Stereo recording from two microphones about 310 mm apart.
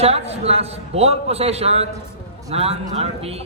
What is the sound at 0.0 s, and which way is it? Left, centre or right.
A man's voice, centre.